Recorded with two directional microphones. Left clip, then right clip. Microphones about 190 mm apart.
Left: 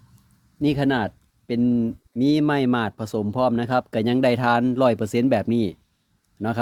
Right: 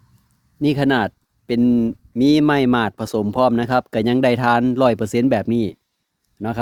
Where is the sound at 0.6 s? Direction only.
60° right (ahead or behind).